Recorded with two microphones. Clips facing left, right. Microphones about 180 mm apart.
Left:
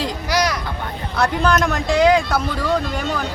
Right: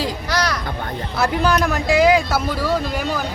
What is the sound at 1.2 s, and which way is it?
Speech, 5° right (ahead or behind).